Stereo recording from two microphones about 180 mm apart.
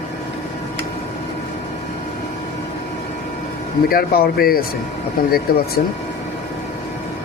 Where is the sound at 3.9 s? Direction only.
60° left (ahead or behind).